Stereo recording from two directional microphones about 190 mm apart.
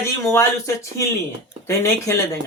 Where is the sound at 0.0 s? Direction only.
15° left (ahead or behind).